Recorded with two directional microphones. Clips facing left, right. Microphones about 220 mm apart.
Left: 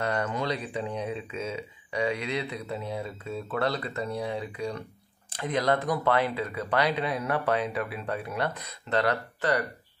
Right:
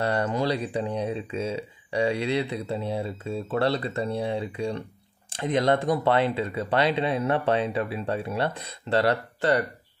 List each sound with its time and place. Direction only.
0.0 s speech: 30° right (ahead or behind)